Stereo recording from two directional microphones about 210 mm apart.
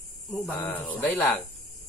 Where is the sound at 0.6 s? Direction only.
10° left (ahead or behind).